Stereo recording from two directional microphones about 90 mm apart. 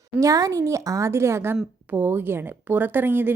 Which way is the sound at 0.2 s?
40° right (ahead or behind).